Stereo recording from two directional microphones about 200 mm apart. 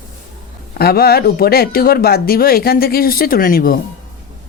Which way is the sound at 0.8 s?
50° left (ahead or behind).